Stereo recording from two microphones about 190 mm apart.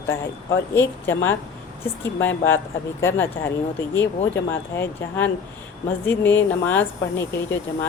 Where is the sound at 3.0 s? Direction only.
10° left (ahead or behind).